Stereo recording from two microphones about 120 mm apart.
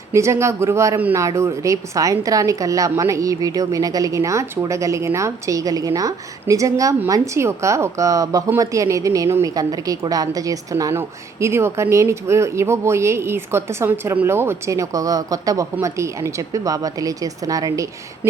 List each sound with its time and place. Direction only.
0.1 s a woman's voice: 25° right (ahead or behind)